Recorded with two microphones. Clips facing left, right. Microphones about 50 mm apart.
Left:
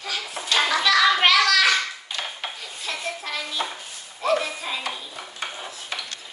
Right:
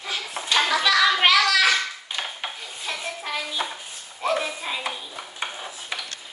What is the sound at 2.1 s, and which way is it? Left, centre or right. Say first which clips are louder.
Dishes: even; centre.